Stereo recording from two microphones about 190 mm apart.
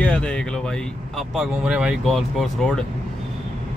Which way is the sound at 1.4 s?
5° right (ahead or behind).